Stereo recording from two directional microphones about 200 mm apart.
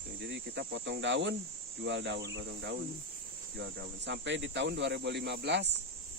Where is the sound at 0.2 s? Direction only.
60° right (ahead or behind).